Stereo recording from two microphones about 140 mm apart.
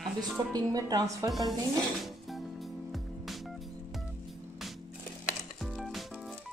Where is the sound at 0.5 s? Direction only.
25° right (ahead or behind).